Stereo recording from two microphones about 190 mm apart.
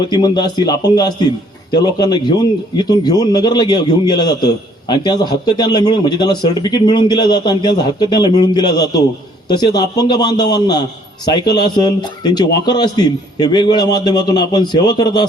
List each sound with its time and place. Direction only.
0.0 s a man's voice: 20° left (ahead or behind)